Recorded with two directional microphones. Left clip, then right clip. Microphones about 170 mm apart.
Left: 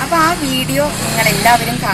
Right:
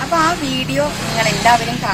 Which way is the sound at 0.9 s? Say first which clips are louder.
Left 2 dB; 50° left (ahead or behind).